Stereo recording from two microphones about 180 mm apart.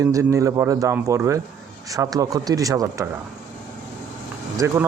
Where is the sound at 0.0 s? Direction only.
15° right (ahead or behind).